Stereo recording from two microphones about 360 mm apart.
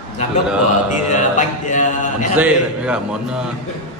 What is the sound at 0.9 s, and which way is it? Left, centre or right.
Speech, left.